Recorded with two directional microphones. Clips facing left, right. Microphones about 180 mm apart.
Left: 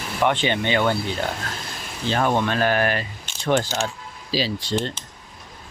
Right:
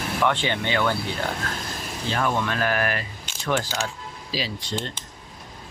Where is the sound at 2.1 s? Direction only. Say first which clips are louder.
Left 4 dB; 30° left (ahead or behind).